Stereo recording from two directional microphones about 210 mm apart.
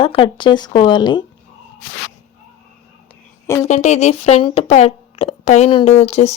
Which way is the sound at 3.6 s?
35° left (ahead or behind).